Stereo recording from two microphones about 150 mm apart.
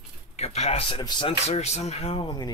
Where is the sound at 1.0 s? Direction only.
30° left (ahead or behind).